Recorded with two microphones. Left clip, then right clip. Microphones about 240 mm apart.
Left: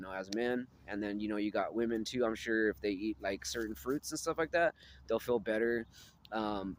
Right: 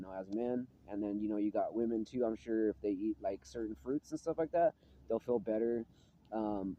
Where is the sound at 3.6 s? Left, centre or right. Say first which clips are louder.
Left 2 dB; left.